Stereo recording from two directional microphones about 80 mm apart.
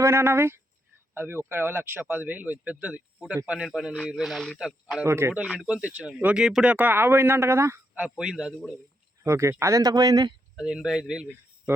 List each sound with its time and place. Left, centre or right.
0.0 s speech: right; by 5.0 s centre
5.0 s speech: right
5.6 s speech: centre
6.7 s speech: right
8.1 s speech: centre
9.2 s speech: right
9.8 s speech: right
10.6 s speech: centre